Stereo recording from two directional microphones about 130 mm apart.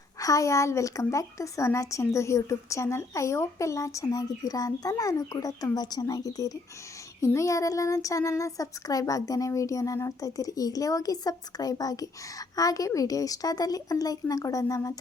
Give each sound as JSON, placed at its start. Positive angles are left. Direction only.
{"t": 0.2, "sound": "speech", "side_deg": 25}